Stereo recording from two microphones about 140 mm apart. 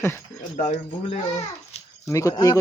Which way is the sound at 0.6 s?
55° left (ahead or behind).